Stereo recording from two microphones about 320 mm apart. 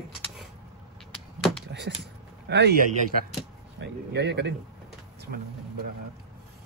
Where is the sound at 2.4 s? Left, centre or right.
Right.